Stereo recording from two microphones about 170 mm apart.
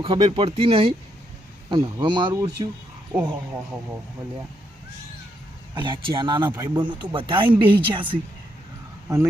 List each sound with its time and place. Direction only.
0.0 s speech: 35° right (ahead or behind)
5.7 s speech: 30° right (ahead or behind)
9.0 s speech: 15° right (ahead or behind)